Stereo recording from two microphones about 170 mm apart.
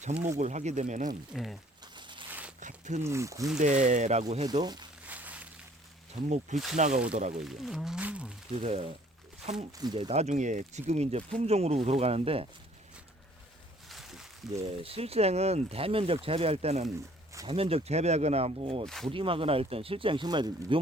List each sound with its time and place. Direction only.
0.0 s speech: 40° right (ahead or behind)
1.3 s speech: centre (ahead or behind)
1.8 s a sound: 25° right (ahead or behind)
2.6 s a sound: 45° right (ahead or behind)
3.0 s speech: 15° right (ahead or behind)
3.6 s speech: 45° right (ahead or behind)
4.6 s speech: 25° right (ahead or behind)
5.0 s a sound: 10° right (ahead or behind)
6.2 s speech: 45° right (ahead or behind)
7.3 s speech: centre (ahead or behind)
8.6 s speech: 40° right (ahead or behind)
9.7 s speech: 25° right (ahead or behind)
13.8 s a sound: centre (ahead or behind)
14.5 s speech: 35° right (ahead or behind)